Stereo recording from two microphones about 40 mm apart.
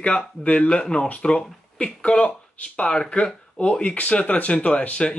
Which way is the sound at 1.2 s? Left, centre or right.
Left.